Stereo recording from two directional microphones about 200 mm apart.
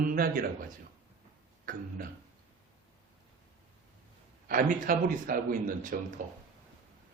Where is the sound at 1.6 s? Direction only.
45° right (ahead or behind).